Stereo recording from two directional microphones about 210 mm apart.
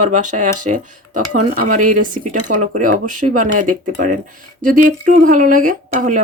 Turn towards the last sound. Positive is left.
turn(degrees=-40)  # may be behind; listen again after turning